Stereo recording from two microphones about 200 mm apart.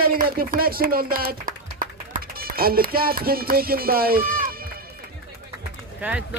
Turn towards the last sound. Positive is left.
turn(degrees=-5)  # may be behind; listen again after turning